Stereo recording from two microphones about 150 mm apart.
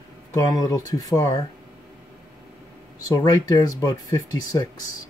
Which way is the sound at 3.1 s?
25° left (ahead or behind).